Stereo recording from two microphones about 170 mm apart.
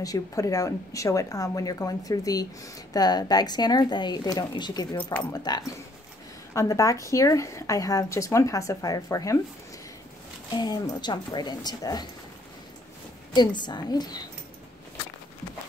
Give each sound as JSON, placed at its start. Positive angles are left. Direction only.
{"t": 0.0, "sound": "speech", "side_deg": 20}
{"t": 10.5, "sound": "speech", "side_deg": 25}
{"t": 13.3, "sound": "speech", "side_deg": 25}